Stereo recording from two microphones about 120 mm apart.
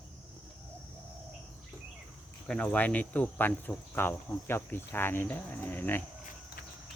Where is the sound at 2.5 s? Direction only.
10° left (ahead or behind).